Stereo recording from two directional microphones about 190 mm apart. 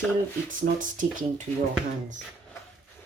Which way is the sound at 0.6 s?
45° right (ahead or behind).